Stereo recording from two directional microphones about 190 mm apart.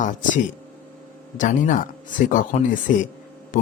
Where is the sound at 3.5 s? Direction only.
45° left (ahead or behind).